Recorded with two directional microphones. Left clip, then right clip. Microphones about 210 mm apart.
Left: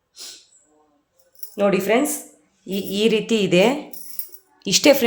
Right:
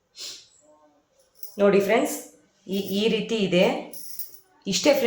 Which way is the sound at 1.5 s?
45° left (ahead or behind).